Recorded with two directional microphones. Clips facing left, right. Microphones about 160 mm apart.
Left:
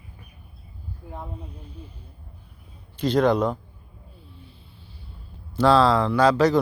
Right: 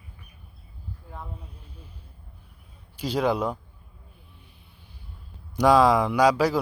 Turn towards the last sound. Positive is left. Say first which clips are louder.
# left 2 dB
turn(degrees=-10)  # may be behind; listen again after turning